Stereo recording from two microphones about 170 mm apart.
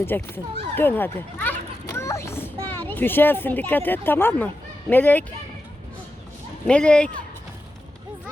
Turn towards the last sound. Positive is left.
turn(degrees=5)  # may be behind; listen again after turning